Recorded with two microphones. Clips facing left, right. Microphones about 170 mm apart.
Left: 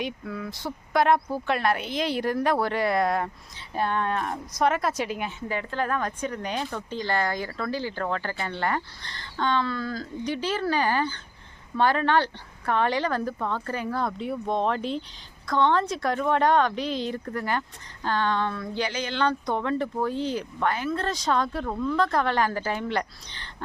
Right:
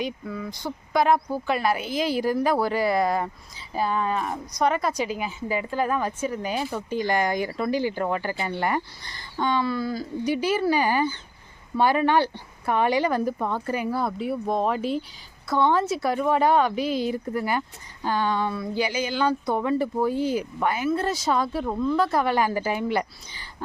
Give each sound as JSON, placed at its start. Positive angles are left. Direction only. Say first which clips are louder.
{"t": 0.0, "sound": "speech", "louder": "right 2 dB", "side_deg": 0}